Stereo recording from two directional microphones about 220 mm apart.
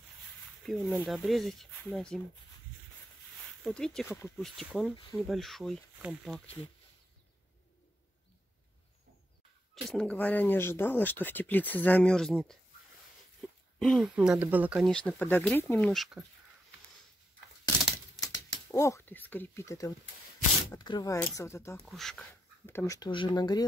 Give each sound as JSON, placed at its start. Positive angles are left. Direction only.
{"t": 0.7, "sound": "speech", "side_deg": 5}
{"t": 3.6, "sound": "speech", "side_deg": 5}
{"t": 9.8, "sound": "speech", "side_deg": 0}
{"t": 13.4, "sound": "a sound", "side_deg": 5}
{"t": 13.7, "sound": "speech", "side_deg": 0}
{"t": 18.2, "sound": "speech", "side_deg": 15}
{"t": 21.7, "sound": "speech", "side_deg": 0}
{"t": 22.7, "sound": "speech", "side_deg": 15}